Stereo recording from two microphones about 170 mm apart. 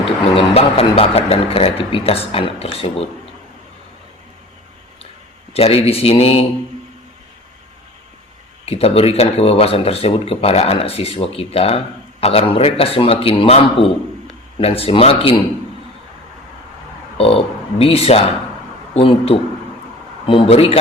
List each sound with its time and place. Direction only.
0.3 s speech: 35° left (ahead or behind)
5.5 s speech: 35° left (ahead or behind)
8.6 s speech: 35° left (ahead or behind)
17.2 s speech: 35° left (ahead or behind)